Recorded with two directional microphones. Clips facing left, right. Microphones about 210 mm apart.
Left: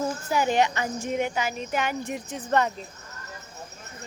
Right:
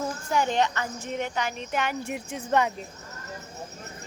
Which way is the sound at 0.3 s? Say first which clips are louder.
Left 1 dB; 5° left (ahead or behind).